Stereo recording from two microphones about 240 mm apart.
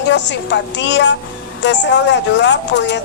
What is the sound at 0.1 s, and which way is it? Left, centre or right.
Speech, left.